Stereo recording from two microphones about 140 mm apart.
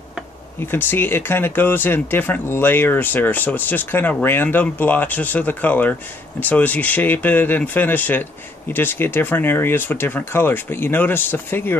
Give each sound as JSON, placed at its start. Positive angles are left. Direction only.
{"t": 0.7, "sound": "speech", "side_deg": 15}